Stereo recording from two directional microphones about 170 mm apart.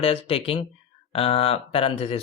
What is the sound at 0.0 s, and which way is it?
Speech, 35° left (ahead or behind).